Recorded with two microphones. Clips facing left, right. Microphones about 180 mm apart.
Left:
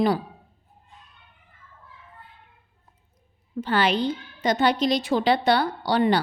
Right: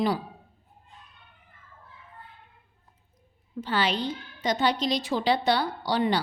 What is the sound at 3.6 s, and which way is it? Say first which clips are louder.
A woman's voice: left 5 dB; 55° left (ahead or behind).